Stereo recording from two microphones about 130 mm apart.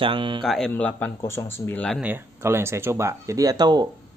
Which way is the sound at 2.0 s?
15° right (ahead or behind).